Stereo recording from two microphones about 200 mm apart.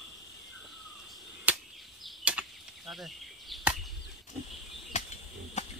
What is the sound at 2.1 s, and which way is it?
Arrow, 5° right (ahead or behind).